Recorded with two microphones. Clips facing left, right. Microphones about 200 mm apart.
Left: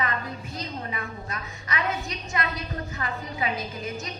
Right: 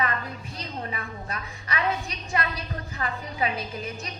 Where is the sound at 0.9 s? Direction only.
35° right (ahead or behind).